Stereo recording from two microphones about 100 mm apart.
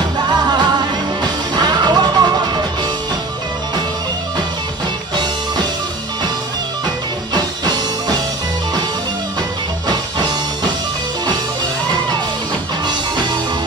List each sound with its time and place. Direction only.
0.3 s music: 45° right (ahead or behind)
7.3 s music: 45° right (ahead or behind)
9.8 s music: 45° right (ahead or behind)